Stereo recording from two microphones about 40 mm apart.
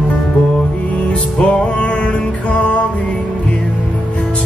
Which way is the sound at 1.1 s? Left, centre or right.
Left.